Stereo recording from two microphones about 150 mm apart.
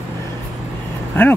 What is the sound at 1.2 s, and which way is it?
Speech, 15° left (ahead or behind).